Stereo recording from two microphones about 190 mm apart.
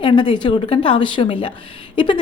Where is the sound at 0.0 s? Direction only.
25° left (ahead or behind).